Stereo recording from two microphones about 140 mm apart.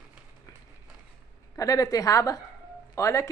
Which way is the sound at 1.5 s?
25° left (ahead or behind).